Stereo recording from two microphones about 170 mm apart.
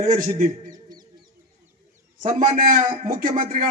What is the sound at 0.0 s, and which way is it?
Speech, 50° right (ahead or behind).